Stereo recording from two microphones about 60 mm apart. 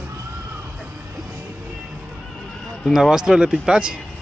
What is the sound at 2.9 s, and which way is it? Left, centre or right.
Speech, centre.